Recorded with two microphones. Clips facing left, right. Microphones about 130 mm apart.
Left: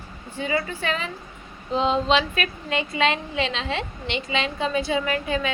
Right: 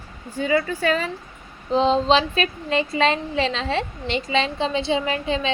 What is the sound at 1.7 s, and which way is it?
A woman's voice, 30° right (ahead or behind).